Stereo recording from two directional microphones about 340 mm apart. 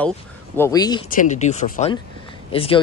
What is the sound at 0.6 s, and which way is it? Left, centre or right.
Speech, centre.